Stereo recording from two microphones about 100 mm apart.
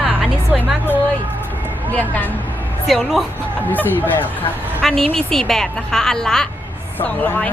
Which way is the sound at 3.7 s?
20° left (ahead or behind).